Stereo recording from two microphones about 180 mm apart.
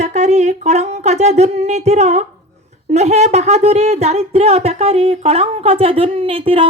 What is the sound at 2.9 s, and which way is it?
A woman's voice, 40° right (ahead or behind).